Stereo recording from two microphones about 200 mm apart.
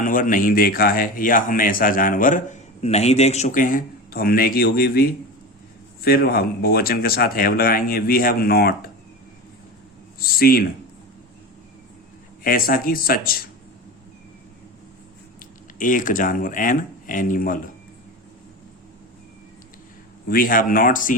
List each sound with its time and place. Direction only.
0.0 s speech: 40° left (ahead or behind)
10.2 s speech: 50° left (ahead or behind)
12.4 s speech: 45° left (ahead or behind)
15.8 s speech: 40° left (ahead or behind)
20.2 s speech: 45° left (ahead or behind)